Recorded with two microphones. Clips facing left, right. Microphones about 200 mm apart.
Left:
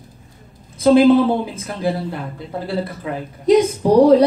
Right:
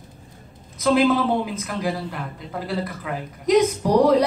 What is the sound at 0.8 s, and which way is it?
Speech, 30° left (ahead or behind).